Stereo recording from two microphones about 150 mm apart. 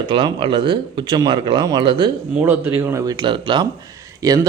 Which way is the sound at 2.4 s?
10° right (ahead or behind).